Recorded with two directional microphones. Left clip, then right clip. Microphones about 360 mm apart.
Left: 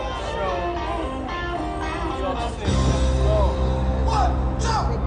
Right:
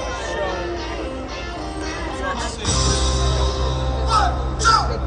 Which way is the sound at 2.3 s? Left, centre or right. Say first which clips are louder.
Right 2 dB; left.